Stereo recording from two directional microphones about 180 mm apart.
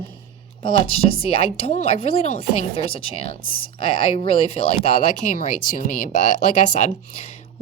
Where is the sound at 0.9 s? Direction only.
30° left (ahead or behind).